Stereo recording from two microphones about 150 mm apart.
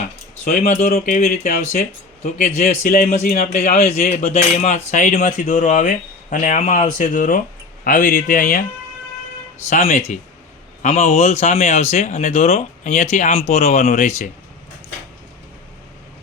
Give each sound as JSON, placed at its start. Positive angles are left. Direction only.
{"t": 0.4, "sound": "speech", "side_deg": 55}
{"t": 9.6, "sound": "speech", "side_deg": 50}